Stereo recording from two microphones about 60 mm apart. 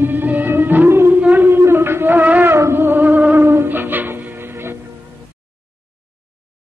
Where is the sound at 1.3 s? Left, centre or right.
Right.